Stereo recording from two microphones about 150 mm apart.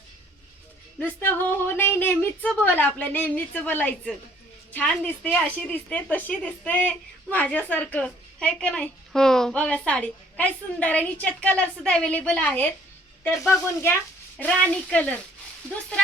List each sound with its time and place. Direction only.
0.9 s a woman's voice: 15° left (ahead or behind)